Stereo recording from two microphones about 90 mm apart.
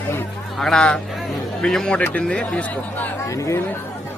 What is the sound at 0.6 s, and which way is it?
Speech, 5° left (ahead or behind).